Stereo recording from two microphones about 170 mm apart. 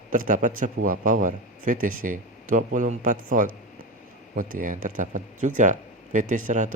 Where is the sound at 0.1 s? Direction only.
50° right (ahead or behind).